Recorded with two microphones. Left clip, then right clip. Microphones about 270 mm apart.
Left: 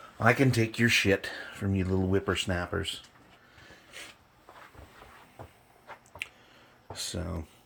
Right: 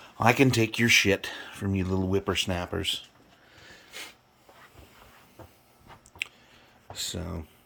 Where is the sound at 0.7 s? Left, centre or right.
Centre.